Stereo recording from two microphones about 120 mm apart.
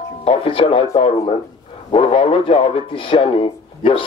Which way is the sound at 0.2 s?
50° left (ahead or behind).